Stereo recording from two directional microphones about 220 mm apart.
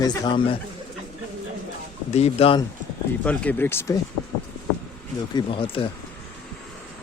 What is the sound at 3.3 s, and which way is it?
Speech, 10° left (ahead or behind).